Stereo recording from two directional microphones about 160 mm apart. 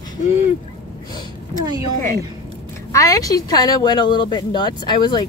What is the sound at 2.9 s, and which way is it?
Speech, 20° left (ahead or behind).